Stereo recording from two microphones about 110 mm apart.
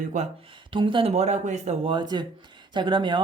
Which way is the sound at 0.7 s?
50° right (ahead or behind).